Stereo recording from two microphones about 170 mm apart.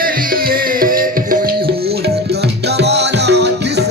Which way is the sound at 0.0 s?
60° right (ahead or behind).